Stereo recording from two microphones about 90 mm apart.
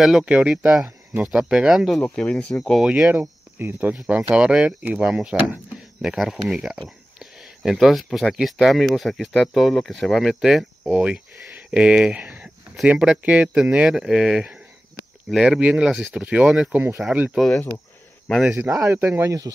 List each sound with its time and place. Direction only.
0.0 s speech: 5° right (ahead or behind)
2.0 s speech: 10° left (ahead or behind)
2.8 s speech: 10° right (ahead or behind)
3.1 s speech: 25° right (ahead or behind)
4.4 s speech: 10° right (ahead or behind)
10.9 s speech: 15° right (ahead or behind)
18.6 s speech: 30° right (ahead or behind)